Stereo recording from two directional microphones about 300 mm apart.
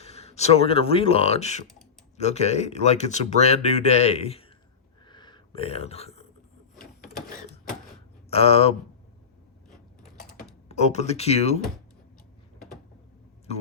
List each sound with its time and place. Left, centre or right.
0.0 s speech: left
5.0 s a sound: centre
8.3 s speech: centre
9.6 s mechanisms: centre
10.7 s speech: left